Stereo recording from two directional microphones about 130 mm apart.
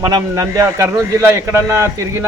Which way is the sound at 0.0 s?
30° right (ahead or behind).